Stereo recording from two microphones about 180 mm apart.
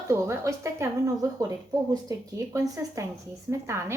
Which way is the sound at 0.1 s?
15° right (ahead or behind).